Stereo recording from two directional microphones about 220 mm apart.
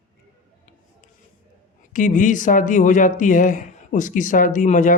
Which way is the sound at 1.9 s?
35° left (ahead or behind).